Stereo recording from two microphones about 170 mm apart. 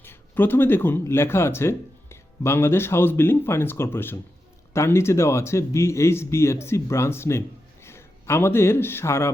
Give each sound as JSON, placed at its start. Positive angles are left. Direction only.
{"t": 0.0, "sound": "speech", "side_deg": 15}